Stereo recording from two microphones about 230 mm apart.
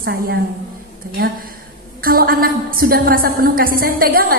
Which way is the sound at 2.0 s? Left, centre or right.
Right.